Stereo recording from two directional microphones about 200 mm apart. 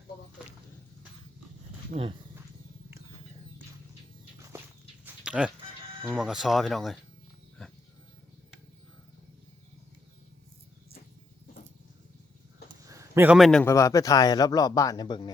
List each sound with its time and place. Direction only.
1.9 s speech: 40° right (ahead or behind)
5.2 s fowl: 5° right (ahead or behind)
6.1 s speech: centre (ahead or behind)
12.8 s a sound: 15° right (ahead or behind); by 13.7 s centre (ahead or behind)
13.7 s speech: 15° left (ahead or behind)